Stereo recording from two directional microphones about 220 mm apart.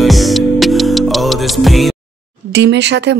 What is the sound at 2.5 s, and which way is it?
Speech, 50° right (ahead or behind).